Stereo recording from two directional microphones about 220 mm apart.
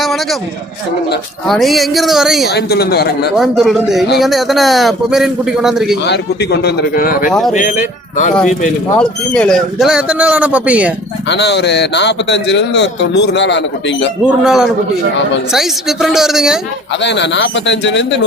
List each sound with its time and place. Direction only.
0.0 s a sound: centre (ahead or behind)
1.5 s a man's voice: centre (ahead or behind)
2.5 s a man's voice: 45° left (ahead or behind)
3.3 s a man's voice: centre (ahead or behind)
6.1 s a man's voice: 50° left (ahead or behind)
7.3 s a man's voice: centre (ahead or behind)
7.5 s speech: 35° left (ahead or behind)
9.0 s a man's voice: 5° left (ahead or behind)
11.3 s a man's voice: 50° left (ahead or behind)
14.3 s a man's voice: centre (ahead or behind)
17.0 s a man's voice: 55° left (ahead or behind)